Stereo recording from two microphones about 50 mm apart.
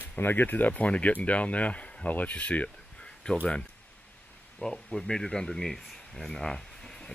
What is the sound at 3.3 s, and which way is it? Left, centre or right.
Speech, centre.